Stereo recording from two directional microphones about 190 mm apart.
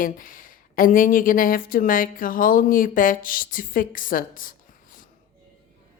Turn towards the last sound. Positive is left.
turn(degrees=45)  # may be behind; listen again after turning